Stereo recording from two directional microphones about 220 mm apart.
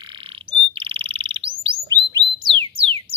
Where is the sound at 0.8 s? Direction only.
25° right (ahead or behind).